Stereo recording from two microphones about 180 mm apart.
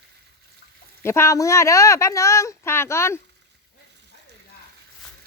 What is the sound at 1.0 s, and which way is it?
Speech, 15° left (ahead or behind).